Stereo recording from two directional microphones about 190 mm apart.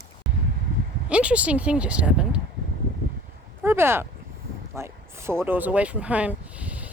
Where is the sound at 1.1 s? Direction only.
5° right (ahead or behind).